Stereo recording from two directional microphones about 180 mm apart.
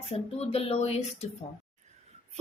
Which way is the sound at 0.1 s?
35° left (ahead or behind).